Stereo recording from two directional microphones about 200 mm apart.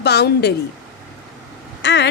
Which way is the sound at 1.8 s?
60° left (ahead or behind).